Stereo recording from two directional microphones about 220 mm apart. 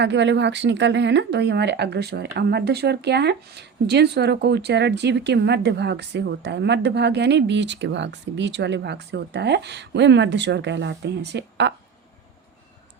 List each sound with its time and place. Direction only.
0.0 s speech: 55° right (ahead or behind)